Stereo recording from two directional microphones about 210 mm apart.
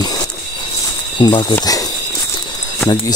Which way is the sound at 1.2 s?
20° left (ahead or behind).